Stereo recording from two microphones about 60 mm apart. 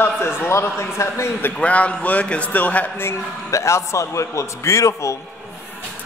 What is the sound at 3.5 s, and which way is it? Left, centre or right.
A man's voice, left.